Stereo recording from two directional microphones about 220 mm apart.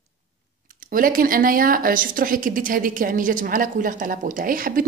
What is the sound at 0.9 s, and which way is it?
Speech, 40° right (ahead or behind).